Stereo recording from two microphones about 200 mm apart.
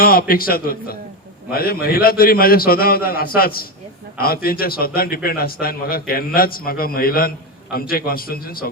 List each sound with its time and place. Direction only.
0.0 s a man's voice: 50° left (ahead or behind)